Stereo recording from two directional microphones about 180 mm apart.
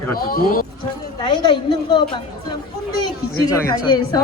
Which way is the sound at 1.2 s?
25° left (ahead or behind).